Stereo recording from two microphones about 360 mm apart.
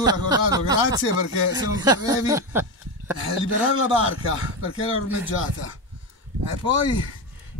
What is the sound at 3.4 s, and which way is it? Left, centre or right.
Speech, left.